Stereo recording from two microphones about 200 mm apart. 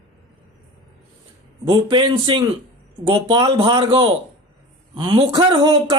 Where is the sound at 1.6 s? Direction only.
25° right (ahead or behind).